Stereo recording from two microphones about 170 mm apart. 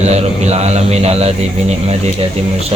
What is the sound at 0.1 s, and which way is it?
Speech, 40° right (ahead or behind).